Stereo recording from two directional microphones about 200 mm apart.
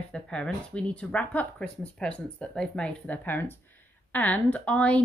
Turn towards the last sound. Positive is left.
turn(degrees=5)  # may be behind; listen again after turning